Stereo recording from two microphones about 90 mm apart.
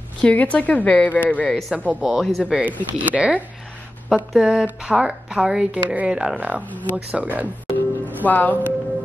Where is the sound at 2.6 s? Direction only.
15° right (ahead or behind).